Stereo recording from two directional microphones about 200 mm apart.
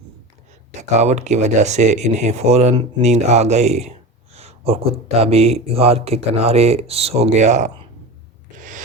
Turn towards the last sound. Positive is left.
turn(degrees=-35)  # may be behind; listen again after turning